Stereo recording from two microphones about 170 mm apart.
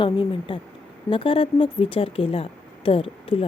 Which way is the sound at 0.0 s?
30° left (ahead or behind).